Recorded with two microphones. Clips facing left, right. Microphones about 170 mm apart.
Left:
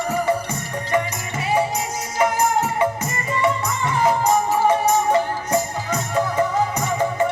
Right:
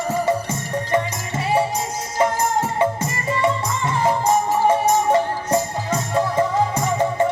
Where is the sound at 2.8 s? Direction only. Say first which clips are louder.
Right 1 dB; 30° right (ahead or behind).